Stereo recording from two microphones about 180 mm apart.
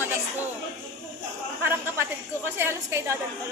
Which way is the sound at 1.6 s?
10° right (ahead or behind).